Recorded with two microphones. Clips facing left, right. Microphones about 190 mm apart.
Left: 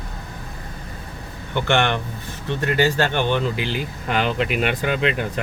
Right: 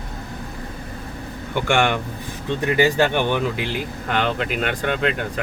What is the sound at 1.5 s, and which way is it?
Speech, 10° right (ahead or behind).